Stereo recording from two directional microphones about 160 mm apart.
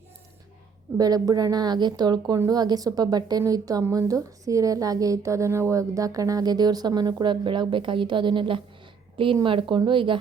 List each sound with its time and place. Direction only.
0.9 s a woman's voice: 25° right (ahead or behind)